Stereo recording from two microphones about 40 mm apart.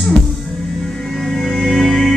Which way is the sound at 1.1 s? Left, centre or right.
Centre.